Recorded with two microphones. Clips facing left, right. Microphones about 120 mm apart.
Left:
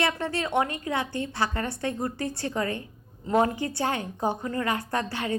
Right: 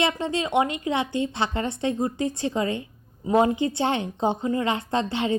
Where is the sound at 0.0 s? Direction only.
20° right (ahead or behind).